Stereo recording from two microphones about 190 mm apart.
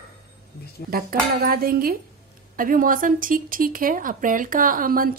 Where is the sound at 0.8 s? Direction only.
50° right (ahead or behind).